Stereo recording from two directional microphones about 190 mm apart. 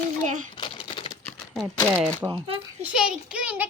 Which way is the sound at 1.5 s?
Centre (ahead or behind).